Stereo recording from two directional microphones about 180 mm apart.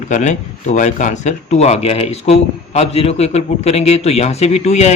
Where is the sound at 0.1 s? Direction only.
40° left (ahead or behind).